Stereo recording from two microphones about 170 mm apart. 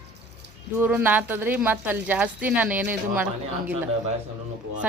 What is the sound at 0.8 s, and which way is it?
Speech, 10° right (ahead or behind).